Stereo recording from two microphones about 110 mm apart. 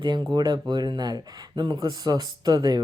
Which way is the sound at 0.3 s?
40° right (ahead or behind).